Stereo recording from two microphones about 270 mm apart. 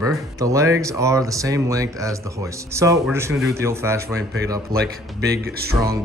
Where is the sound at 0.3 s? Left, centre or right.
Centre.